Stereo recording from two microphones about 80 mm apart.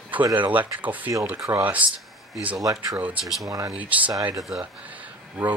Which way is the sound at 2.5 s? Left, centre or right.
Right.